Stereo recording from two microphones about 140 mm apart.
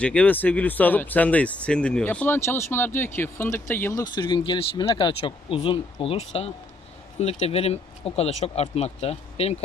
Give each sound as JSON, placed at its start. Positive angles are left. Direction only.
{"t": 0.0, "sound": "speech", "side_deg": 10}
{"t": 4.0, "sound": "speech", "side_deg": 30}